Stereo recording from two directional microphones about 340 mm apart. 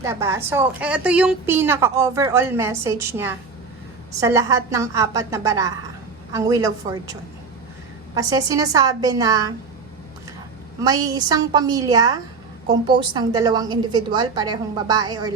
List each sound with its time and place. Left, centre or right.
0.0 s a woman's voice: centre
10.8 s a woman's voice: centre